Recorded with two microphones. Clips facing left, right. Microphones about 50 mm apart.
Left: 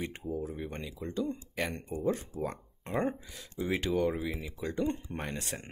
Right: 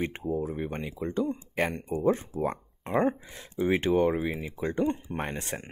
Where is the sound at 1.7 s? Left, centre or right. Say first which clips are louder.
Right 5 dB; centre.